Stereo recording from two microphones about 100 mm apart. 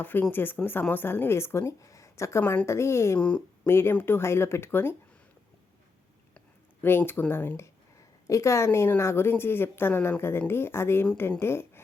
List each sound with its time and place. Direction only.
0.0 s a woman's voice: 20° left (ahead or behind)
3.2 s speech: 10° left (ahead or behind)
3.7 s a woman's voice: 25° left (ahead or behind)
6.8 s a woman's voice: 20° left (ahead or behind)